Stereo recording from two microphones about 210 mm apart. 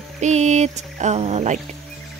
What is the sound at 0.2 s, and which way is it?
A woman's voice, 35° right (ahead or behind).